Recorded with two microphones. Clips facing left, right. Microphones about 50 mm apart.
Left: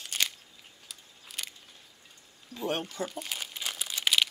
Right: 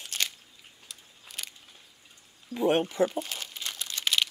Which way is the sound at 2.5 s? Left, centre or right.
Right.